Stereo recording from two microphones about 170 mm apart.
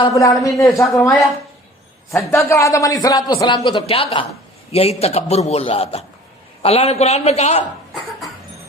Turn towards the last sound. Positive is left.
turn(degrees=40)  # may be behind; listen again after turning